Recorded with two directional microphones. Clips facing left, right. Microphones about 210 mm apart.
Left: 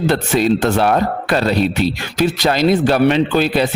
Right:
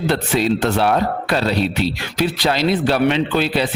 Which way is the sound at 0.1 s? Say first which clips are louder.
Left 2 dB; 45° left (ahead or behind).